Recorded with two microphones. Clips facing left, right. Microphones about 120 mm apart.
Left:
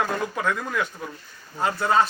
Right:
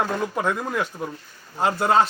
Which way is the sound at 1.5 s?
20° right (ahead or behind).